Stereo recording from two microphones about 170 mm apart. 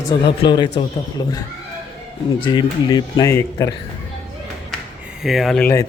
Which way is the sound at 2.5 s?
25° left (ahead or behind).